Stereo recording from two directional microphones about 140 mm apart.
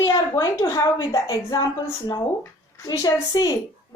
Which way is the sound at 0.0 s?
25° left (ahead or behind).